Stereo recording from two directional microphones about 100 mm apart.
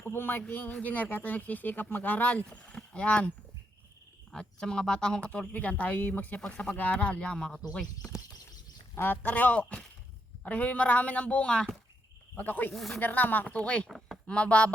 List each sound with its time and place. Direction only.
0.0 s speech: 20° left (ahead or behind)
9.0 s speech: 20° left (ahead or behind)
12.7 s speech: centre (ahead or behind)
13.0 s speech: 20° left (ahead or behind)